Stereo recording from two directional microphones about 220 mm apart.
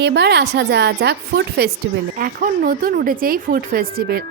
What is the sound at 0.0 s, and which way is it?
A woman's voice, 50° right (ahead or behind).